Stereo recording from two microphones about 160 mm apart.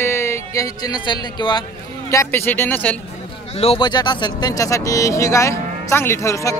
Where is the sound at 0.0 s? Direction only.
15° left (ahead or behind).